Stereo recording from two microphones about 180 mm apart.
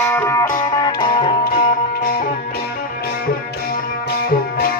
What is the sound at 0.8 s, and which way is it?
Music, 25° left (ahead or behind).